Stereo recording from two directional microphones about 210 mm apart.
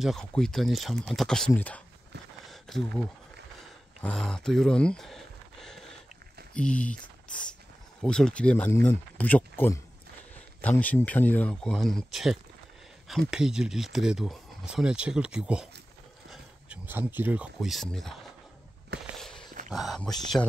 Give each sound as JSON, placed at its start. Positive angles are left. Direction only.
{"t": 0.0, "sound": "speech", "side_deg": 0}
{"t": 2.4, "sound": "a sound", "side_deg": 0}
{"t": 6.5, "sound": "speech", "side_deg": 5}
{"t": 10.8, "sound": "speech", "side_deg": 5}
{"t": 19.1, "sound": "a sound", "side_deg": 0}
{"t": 19.7, "sound": "speech", "side_deg": 0}